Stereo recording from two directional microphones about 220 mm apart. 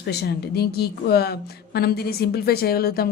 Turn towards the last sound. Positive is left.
turn(degrees=45)  # may be behind; listen again after turning